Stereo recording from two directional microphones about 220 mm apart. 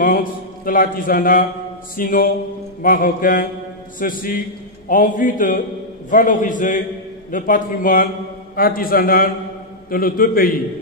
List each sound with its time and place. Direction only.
0.0 s mantra: 40° left (ahead or behind)
2.0 s a man's voice: 40° left (ahead or behind)